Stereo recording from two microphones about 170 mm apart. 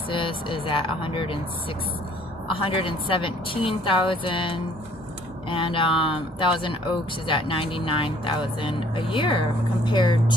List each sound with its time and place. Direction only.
0.1 s speech: 30° left (ahead or behind)
2.6 s speech: 30° left (ahead or behind)